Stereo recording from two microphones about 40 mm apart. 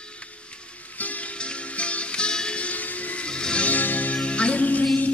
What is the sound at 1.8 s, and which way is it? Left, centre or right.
Music, left.